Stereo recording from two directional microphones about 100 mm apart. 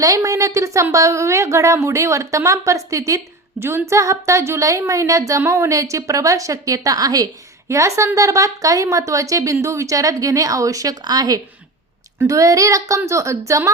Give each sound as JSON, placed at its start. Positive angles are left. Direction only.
{"t": 0.0, "sound": "a woman's voice", "side_deg": -35}